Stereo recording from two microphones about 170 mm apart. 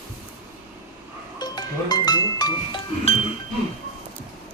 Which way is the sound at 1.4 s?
25° left (ahead or behind).